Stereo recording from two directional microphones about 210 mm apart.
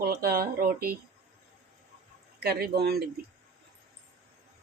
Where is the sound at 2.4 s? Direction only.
50° right (ahead or behind).